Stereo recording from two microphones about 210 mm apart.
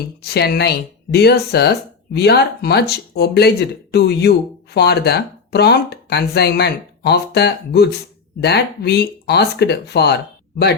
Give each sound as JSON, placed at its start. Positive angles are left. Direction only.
{"t": 0.2, "sound": "speech", "side_deg": 50}